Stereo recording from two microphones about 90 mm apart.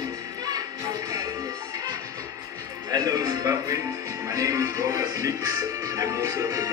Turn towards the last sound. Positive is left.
turn(degrees=-40)  # may be behind; listen again after turning